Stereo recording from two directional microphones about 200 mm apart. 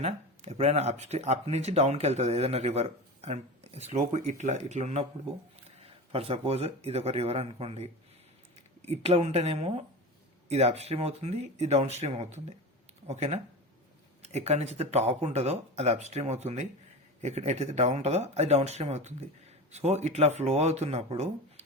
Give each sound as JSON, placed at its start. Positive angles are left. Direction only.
{"t": 0.0, "sound": "speech", "side_deg": -30}